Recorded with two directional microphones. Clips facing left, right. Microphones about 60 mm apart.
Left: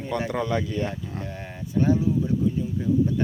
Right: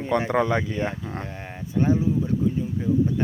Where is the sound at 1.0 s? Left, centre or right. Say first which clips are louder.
Right 2 dB; right.